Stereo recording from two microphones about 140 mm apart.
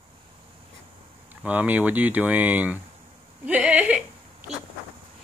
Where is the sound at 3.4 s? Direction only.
10° right (ahead or behind).